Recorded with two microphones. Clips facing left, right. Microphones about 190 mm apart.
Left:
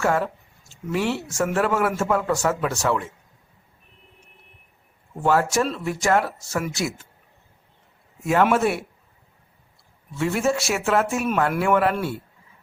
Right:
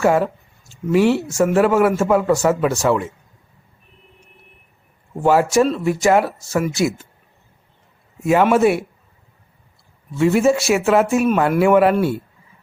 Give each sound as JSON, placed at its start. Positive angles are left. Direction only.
{"t": 0.0, "sound": "a man's voice", "side_deg": -10}
{"t": 5.2, "sound": "a man's voice", "side_deg": -10}
{"t": 8.2, "sound": "a man's voice", "side_deg": -5}
{"t": 10.2, "sound": "a man's voice", "side_deg": -5}